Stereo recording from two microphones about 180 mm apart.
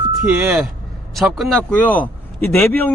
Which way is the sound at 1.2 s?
Centre (ahead or behind).